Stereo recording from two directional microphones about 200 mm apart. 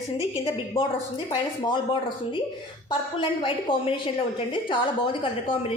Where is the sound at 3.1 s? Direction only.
25° left (ahead or behind).